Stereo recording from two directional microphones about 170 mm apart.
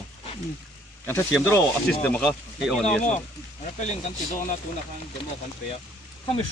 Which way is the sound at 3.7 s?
45° left (ahead or behind).